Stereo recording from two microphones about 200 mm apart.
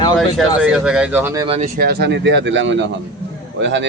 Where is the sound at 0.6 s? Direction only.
5° right (ahead or behind).